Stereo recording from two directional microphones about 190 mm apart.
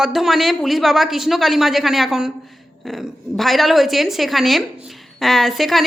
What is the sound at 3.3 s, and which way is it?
Speech, centre (ahead or behind).